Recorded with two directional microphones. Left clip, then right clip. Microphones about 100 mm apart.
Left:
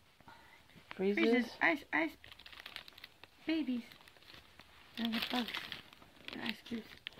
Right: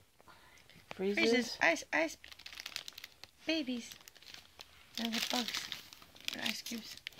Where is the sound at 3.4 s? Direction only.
50° right (ahead or behind).